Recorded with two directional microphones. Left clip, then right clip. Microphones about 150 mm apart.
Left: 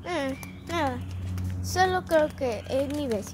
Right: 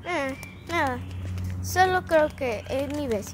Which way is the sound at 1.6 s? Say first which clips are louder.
Right 3 dB; 20° right (ahead or behind).